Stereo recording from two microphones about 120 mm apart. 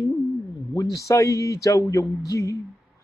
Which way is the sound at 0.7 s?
30° left (ahead or behind).